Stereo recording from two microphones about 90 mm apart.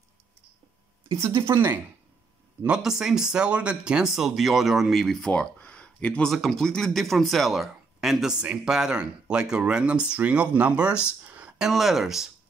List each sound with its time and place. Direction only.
1.0 s speech: 30° right (ahead or behind)
2.6 s speech: 10° right (ahead or behind); by 6.3 s 15° left (ahead or behind)
6.3 s speech: centre (ahead or behind)